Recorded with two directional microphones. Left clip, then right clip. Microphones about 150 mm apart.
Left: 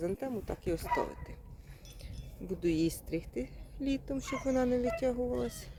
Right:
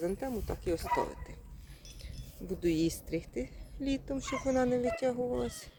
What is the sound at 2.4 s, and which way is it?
Speech, 5° left (ahead or behind).